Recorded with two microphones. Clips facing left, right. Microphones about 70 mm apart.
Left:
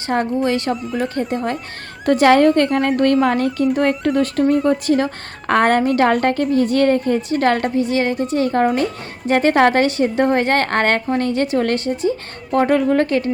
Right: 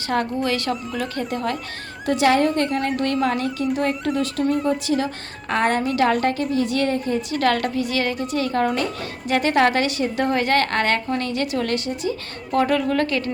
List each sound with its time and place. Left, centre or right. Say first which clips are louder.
0.1 s speech: left 4 dB; left
0.7 s speech: left 3 dB; centre
0.9 s speech: left 5 dB; left
2.0 s a woman's voice: left 6 dB; left
7.3 s speech: left 4 dB; left